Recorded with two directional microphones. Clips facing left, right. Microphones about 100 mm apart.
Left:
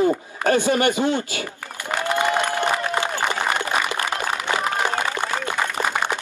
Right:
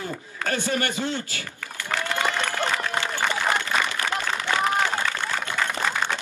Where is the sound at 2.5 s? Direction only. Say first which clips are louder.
Left 4 dB; 20° left (ahead or behind).